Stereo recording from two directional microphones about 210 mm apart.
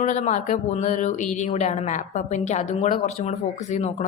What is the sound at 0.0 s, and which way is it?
A woman's voice, 35° left (ahead or behind).